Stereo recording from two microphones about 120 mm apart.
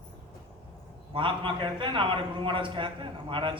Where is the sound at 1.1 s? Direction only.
45° right (ahead or behind).